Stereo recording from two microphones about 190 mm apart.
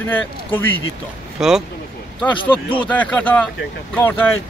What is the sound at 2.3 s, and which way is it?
Speech, 25° left (ahead or behind).